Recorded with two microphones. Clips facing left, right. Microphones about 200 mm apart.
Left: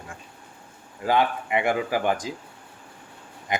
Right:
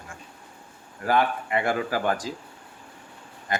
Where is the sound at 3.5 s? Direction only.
20° left (ahead or behind).